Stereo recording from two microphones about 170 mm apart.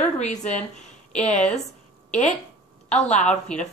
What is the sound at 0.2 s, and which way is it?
Speech, 45° left (ahead or behind).